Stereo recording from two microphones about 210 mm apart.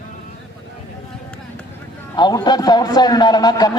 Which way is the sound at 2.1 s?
20° left (ahead or behind).